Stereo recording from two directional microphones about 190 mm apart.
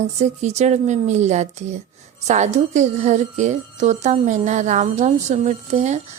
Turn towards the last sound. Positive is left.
turn(degrees=-35)  # may be behind; listen again after turning